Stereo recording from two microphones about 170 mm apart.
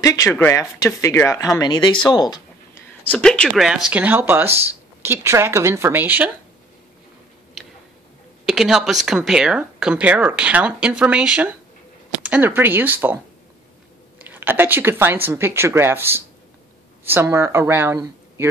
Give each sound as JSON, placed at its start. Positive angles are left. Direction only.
{"t": 0.0, "sound": "speech", "side_deg": 20}
{"t": 2.1, "sound": "a sound", "side_deg": 25}
{"t": 3.0, "sound": "speech", "side_deg": 10}
{"t": 8.5, "sound": "speech", "side_deg": 0}